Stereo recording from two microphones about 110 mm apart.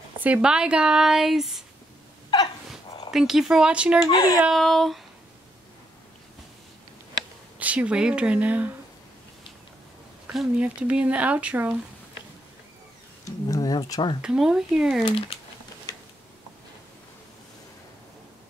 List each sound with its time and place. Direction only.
0.2 s speech: 10° right (ahead or behind)
3.1 s speech: 5° right (ahead or behind)
4.1 s speech: 40° left (ahead or behind)
4.6 s speech: centre (ahead or behind)
7.5 s speech: 15° right (ahead or behind)
10.3 s speech: 5° right (ahead or behind)
13.2 s a sound: 30° left (ahead or behind)
14.2 s speech: 5° right (ahead or behind)
15.0 s speech: 60° left (ahead or behind)